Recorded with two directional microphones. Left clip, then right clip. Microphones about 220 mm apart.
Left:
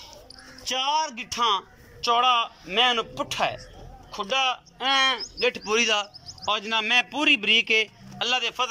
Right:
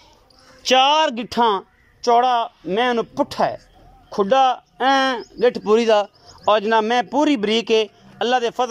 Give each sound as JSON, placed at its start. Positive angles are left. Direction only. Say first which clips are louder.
{"t": 0.7, "sound": "a man's voice", "louder": "right 10 dB", "side_deg": -50}